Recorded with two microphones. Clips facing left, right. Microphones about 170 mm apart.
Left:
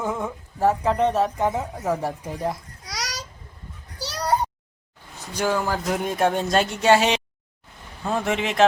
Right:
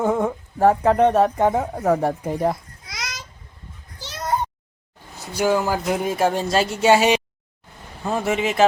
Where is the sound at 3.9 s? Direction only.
40° left (ahead or behind).